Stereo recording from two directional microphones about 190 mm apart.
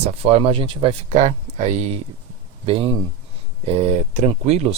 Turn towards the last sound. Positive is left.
turn(degrees=-35)  # may be behind; listen again after turning